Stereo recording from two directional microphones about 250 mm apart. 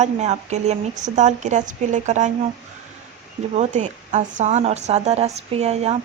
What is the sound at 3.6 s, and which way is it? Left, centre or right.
Speech, right.